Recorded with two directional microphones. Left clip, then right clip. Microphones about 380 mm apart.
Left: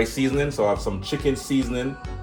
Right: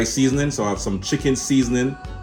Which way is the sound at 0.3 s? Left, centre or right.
Centre.